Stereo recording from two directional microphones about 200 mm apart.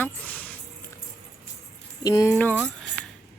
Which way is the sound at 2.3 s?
5° left (ahead or behind).